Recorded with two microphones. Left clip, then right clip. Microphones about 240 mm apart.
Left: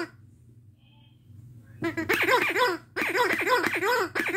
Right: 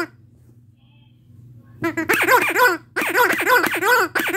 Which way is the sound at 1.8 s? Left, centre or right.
Centre.